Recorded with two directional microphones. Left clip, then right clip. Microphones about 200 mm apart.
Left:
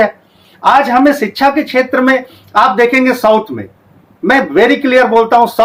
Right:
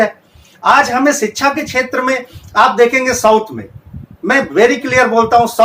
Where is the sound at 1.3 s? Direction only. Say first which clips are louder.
Left 4 dB; 55° left (ahead or behind).